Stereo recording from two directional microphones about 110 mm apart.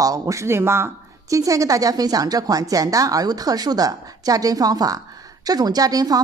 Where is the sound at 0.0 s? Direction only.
30° right (ahead or behind).